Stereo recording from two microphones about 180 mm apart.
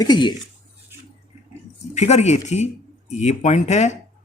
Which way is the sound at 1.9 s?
40° left (ahead or behind).